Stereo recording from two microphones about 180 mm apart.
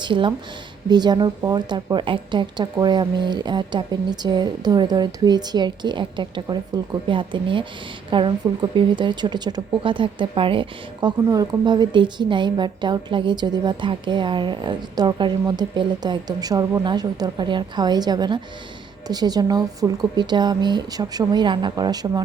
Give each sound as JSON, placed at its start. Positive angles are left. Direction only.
{"t": 0.0, "sound": "speech", "side_deg": -25}